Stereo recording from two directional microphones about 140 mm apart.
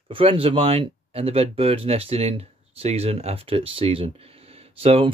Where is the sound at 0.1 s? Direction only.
40° right (ahead or behind).